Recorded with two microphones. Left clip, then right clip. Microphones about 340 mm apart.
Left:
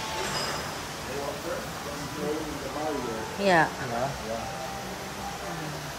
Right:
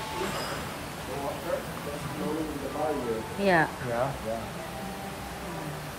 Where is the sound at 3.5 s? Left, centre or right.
Centre.